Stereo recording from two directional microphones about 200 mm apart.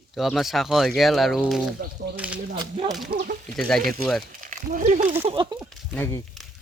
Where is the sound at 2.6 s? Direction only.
25° right (ahead or behind).